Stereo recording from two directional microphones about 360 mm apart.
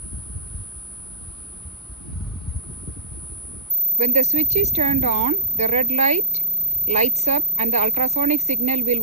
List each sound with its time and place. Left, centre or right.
3.9 s a woman's voice: centre